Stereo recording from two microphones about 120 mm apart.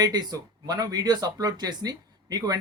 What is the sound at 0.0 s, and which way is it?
Speech, 35° right (ahead or behind).